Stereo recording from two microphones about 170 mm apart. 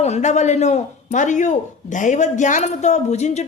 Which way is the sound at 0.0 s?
40° left (ahead or behind).